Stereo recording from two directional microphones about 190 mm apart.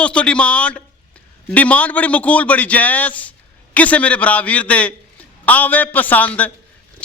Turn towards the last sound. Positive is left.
turn(degrees=10)  # may be behind; listen again after turning